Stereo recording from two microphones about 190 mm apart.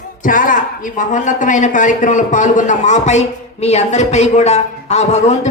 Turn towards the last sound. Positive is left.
turn(degrees=35)  # may be behind; listen again after turning